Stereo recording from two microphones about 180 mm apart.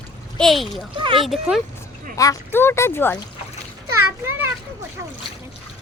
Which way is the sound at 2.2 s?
15° left (ahead or behind).